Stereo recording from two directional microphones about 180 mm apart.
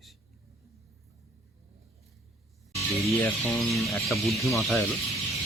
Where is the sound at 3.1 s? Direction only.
15° left (ahead or behind).